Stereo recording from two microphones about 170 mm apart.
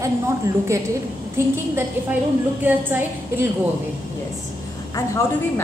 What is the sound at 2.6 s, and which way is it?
Speech, 10° right (ahead or behind).